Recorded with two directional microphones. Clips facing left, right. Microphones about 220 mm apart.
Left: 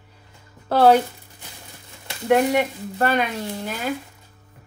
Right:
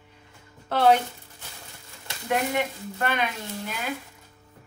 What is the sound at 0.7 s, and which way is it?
Speech, 40° left (ahead or behind).